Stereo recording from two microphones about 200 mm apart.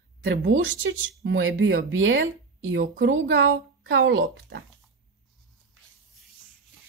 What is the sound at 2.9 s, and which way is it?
Speech, 55° right (ahead or behind).